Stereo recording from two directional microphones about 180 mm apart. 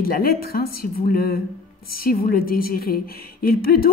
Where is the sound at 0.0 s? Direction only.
55° left (ahead or behind).